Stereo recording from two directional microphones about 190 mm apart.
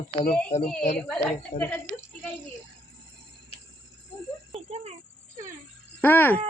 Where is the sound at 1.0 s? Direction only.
5° left (ahead or behind).